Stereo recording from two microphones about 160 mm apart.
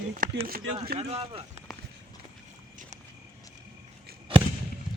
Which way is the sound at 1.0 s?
40° right (ahead or behind).